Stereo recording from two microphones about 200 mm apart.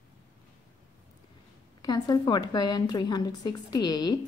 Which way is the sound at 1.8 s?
20° left (ahead or behind).